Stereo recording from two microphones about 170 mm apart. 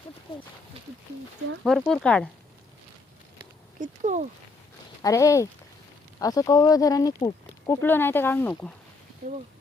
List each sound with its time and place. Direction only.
1.6 s speech: 5° left (ahead or behind)
3.8 s speech: 45° right (ahead or behind)
5.0 s speech: 20° left (ahead or behind)
7.8 s speech: 10° left (ahead or behind)
9.2 s speech: 50° right (ahead or behind)